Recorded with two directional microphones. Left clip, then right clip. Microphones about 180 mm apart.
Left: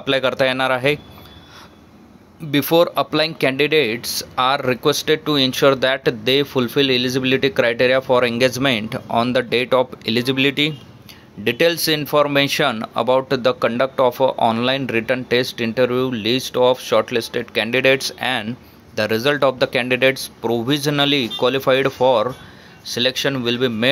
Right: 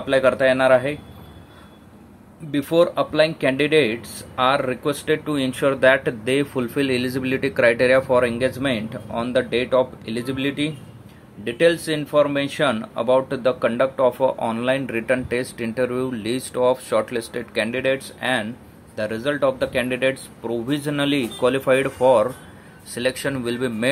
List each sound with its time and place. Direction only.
0.0 s speech: 25° left (ahead or behind)
2.5 s speech: 25° left (ahead or behind)
8.2 s speech: 25° left (ahead or behind)
17.6 s speech: 25° left (ahead or behind)